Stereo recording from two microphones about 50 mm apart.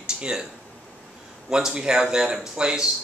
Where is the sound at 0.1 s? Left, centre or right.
Centre.